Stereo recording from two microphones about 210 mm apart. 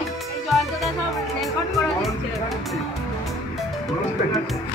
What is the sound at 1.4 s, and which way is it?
Music, centre (ahead or behind).